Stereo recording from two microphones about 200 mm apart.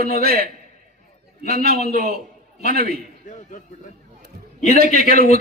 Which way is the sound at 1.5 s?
50° right (ahead or behind).